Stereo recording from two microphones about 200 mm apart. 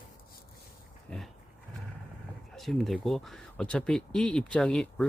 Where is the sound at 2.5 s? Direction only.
Centre (ahead or behind).